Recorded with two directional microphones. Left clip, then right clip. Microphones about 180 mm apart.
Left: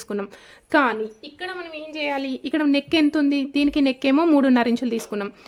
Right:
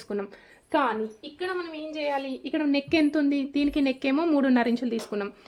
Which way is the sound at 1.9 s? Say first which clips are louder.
Left 4 dB; 60° left (ahead or behind).